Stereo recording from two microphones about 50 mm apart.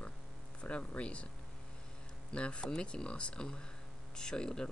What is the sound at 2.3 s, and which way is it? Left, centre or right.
Speech, left.